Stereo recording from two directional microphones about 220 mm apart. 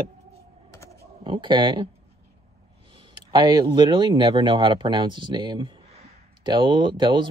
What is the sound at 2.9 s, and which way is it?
Speech, 20° right (ahead or behind).